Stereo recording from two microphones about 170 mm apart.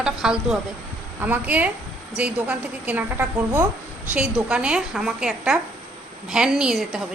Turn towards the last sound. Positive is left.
turn(degrees=-5)  # may be behind; listen again after turning